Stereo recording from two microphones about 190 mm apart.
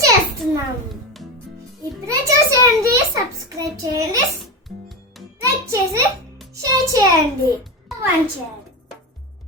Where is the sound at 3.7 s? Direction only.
15° right (ahead or behind).